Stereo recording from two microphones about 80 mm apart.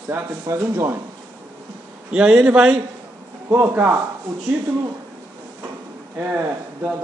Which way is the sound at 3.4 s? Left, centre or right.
Right.